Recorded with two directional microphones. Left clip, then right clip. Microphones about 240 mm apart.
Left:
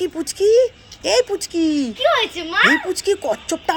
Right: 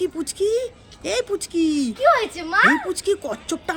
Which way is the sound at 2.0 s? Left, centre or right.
Centre.